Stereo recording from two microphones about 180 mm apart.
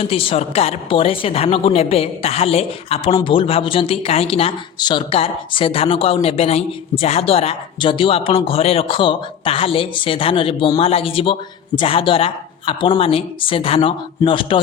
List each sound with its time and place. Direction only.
0.0 s a woman's voice: 30° left (ahead or behind)